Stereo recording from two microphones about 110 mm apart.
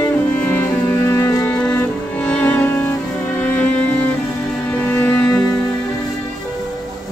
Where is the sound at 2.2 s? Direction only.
15° left (ahead or behind).